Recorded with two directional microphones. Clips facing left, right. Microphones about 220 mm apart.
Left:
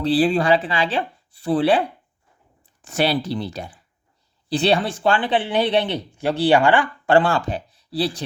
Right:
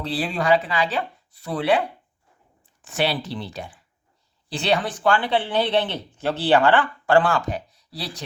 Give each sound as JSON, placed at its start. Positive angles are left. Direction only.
{"t": 0.0, "sound": "speech", "side_deg": 35}
{"t": 2.8, "sound": "speech", "side_deg": 40}